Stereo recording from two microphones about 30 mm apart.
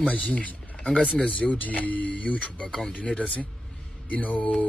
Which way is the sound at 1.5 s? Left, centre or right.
Left.